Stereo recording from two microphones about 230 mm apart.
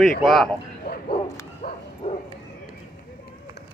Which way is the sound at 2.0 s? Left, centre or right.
Left.